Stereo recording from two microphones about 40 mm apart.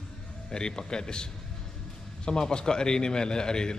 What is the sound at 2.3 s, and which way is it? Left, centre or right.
A man's voice, left.